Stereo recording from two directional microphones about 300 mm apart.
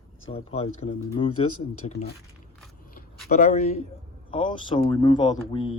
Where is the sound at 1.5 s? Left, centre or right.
Left.